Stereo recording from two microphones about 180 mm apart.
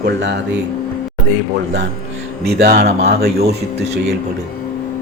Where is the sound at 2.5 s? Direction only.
60° right (ahead or behind).